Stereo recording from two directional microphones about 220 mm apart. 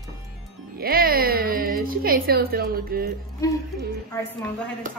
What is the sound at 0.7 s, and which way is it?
Speech, 45° right (ahead or behind).